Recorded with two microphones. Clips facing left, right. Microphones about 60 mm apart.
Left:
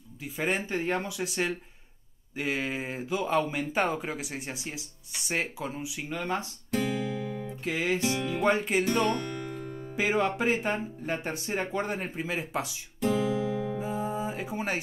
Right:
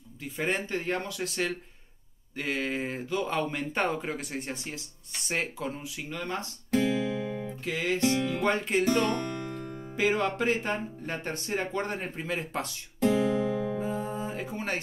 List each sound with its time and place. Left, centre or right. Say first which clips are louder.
0.2 s speech: even; centre
6.7 s guitar: right 3 dB; centre
7.6 s music: even; centre
9.9 s speech: even; centre
13.1 s music: even; centre